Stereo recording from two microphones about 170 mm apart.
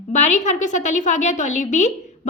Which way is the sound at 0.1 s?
45° left (ahead or behind).